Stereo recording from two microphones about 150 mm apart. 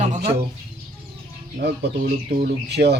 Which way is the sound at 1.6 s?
90° right.